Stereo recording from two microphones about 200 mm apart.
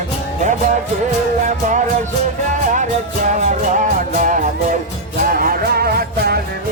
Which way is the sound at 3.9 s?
40° right (ahead or behind).